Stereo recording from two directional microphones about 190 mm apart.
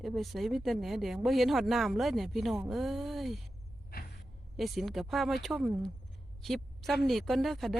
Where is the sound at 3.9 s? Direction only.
55° left (ahead or behind).